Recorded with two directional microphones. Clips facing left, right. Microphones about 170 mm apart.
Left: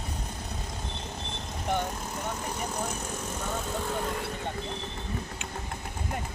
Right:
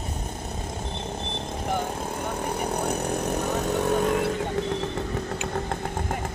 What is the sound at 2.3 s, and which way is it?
Vehicle, 60° right (ahead or behind).